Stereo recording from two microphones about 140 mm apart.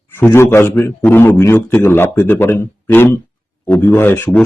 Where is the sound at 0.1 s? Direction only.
15° left (ahead or behind).